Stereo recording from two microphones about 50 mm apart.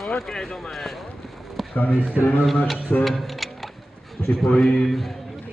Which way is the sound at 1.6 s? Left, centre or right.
Centre.